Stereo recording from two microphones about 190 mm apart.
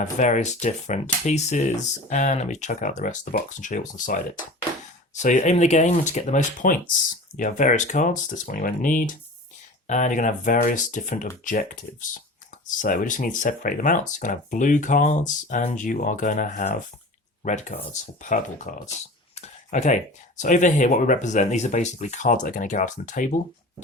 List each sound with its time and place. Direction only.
0.0 s speech: 40° left (ahead or behind)
19.4 s a sound: 40° left (ahead or behind)
20.4 s speech: 40° left (ahead or behind)